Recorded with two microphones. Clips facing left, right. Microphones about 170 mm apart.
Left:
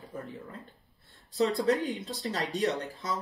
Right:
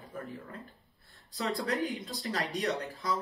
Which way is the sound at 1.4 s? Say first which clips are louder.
Left 6 dB; 25° left (ahead or behind).